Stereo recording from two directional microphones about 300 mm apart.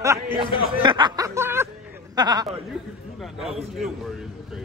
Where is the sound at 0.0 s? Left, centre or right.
Centre.